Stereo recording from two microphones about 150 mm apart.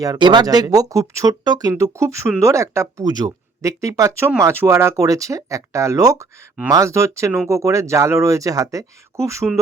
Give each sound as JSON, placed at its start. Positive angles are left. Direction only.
{"t": 0.0, "sound": "speech", "side_deg": -25}